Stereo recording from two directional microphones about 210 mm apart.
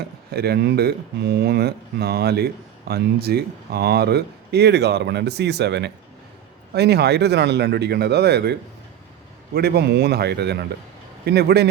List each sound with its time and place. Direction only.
0.3 s speech: 50° right (ahead or behind)
9.6 s speech: 50° right (ahead or behind)